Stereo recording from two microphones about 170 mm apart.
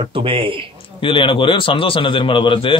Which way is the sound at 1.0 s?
30° left (ahead or behind).